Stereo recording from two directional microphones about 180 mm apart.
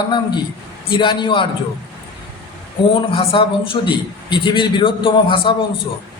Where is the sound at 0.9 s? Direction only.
25° left (ahead or behind).